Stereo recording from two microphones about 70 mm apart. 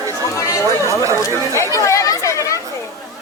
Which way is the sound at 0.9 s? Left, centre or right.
Right.